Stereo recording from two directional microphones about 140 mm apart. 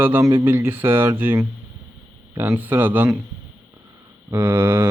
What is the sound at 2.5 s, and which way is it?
Speech, 15° right (ahead or behind).